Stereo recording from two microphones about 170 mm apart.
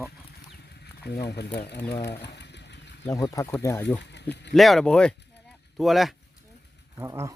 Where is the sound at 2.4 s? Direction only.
90° left.